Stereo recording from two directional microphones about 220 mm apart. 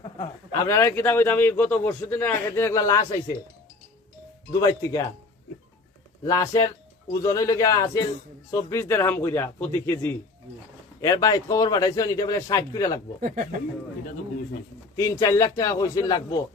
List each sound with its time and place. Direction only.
0.0 s a man's voice: 20° left (ahead or behind)
4.5 s a man's voice: 15° left (ahead or behind)
6.2 s a man's voice: 15° left (ahead or behind)
13.2 s speech: 35° right (ahead or behind)
14.9 s a man's voice: 15° left (ahead or behind)